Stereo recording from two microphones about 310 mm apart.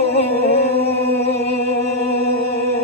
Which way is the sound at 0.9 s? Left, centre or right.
Right.